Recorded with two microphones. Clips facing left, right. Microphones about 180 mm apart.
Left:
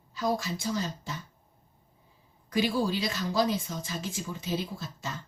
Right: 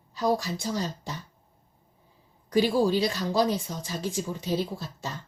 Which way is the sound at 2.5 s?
35° right (ahead or behind).